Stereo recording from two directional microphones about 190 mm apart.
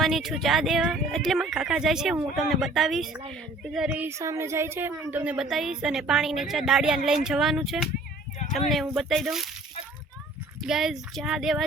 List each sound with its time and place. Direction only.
0.0 s a woman's voice: centre (ahead or behind)
10.7 s a woman's voice: centre (ahead or behind)